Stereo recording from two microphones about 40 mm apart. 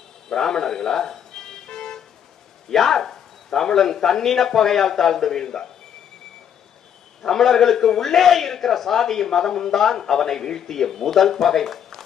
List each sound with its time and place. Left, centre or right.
0.3 s a sound: centre
2.6 s a man's voice: centre
7.2 s a man's voice: centre